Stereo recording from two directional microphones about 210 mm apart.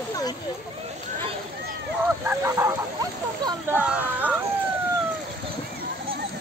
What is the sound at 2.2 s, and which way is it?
Speech, 15° right (ahead or behind).